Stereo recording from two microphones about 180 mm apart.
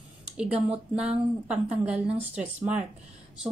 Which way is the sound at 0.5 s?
35° right (ahead or behind).